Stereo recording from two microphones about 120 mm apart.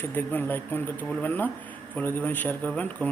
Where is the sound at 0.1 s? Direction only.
15° left (ahead or behind).